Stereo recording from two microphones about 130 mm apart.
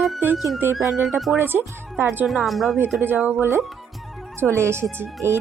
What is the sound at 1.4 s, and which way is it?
Speech, 15° right (ahead or behind).